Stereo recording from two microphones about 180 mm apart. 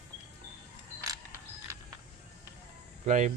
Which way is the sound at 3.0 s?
45° right (ahead or behind).